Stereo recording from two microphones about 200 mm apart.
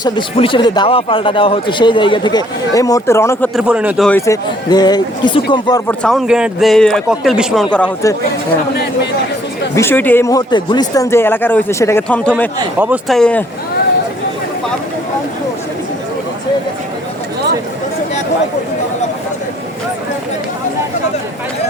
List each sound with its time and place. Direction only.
0.0 s speech: 25° left (ahead or behind)
3.5 s a man's voice: 5° right (ahead or behind)
4.3 s speech: 20° left (ahead or behind)
5.9 s a man's voice: 5° left (ahead or behind)
9.7 s a man's voice: 10° left (ahead or behind)